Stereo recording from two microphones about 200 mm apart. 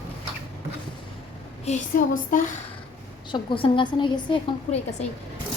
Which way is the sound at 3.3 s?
25° left (ahead or behind).